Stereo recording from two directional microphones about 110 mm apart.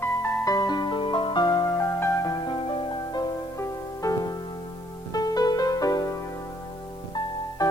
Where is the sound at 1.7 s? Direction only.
25° left (ahead or behind); by 3.3 s 45° left (ahead or behind).